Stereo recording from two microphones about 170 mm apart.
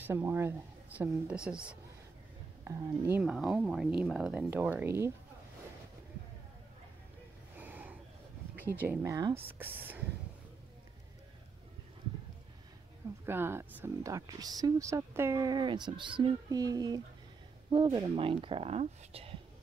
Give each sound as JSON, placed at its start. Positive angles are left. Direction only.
{"t": 0.0, "sound": "a woman's voice", "side_deg": -15}
{"t": 7.6, "sound": "a sound", "side_deg": -10}
{"t": 8.8, "sound": "a woman's voice", "side_deg": -20}
{"t": 13.2, "sound": "a woman's voice", "side_deg": -15}